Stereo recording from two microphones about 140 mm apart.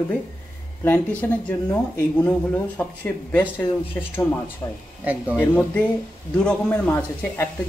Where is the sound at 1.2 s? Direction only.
15° left (ahead or behind).